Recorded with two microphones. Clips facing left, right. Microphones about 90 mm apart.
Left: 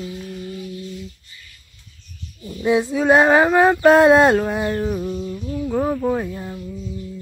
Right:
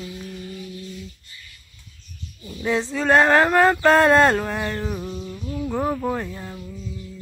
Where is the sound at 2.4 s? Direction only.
Centre (ahead or behind).